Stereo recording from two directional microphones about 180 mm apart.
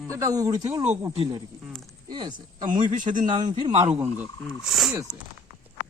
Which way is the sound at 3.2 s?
25° right (ahead or behind).